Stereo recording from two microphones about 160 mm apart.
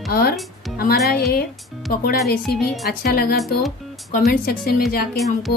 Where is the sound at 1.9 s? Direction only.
70° left (ahead or behind).